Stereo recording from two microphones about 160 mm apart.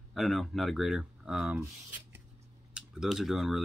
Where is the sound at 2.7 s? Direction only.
5° right (ahead or behind).